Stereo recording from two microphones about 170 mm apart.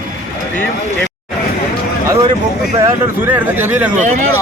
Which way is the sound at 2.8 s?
10° right (ahead or behind).